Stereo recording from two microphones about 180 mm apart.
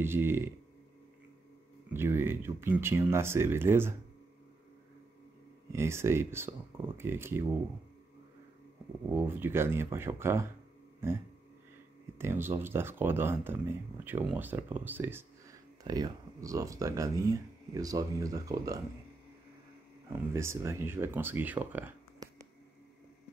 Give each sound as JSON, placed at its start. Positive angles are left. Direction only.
{"t": 0.0, "sound": "speech", "side_deg": -10}
{"t": 2.0, "sound": "speech", "side_deg": -10}
{"t": 5.7, "sound": "speech", "side_deg": -15}
{"t": 9.1, "sound": "speech", "side_deg": -10}
{"t": 12.2, "sound": "speech", "side_deg": -15}
{"t": 15.8, "sound": "speech", "side_deg": -20}
{"t": 20.1, "sound": "speech", "side_deg": -15}
{"t": 22.2, "sound": "a sound", "side_deg": -20}